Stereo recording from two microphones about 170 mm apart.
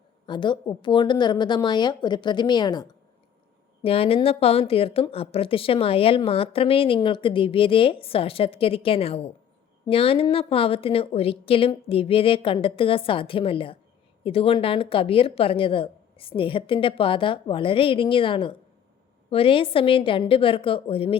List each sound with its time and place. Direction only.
0.3 s speech: 25° left (ahead or behind)
3.8 s a woman's voice: 35° left (ahead or behind)